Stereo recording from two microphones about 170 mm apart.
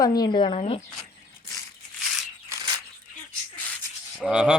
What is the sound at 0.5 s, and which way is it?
Speech, 40° left (ahead or behind).